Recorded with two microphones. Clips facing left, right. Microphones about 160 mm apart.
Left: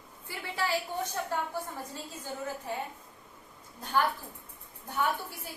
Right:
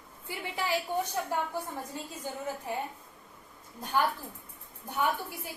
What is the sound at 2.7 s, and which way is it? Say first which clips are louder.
Speech: right 2 dB; 15° right (ahead or behind).